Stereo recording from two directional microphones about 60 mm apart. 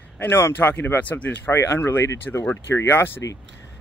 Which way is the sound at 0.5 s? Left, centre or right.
Left.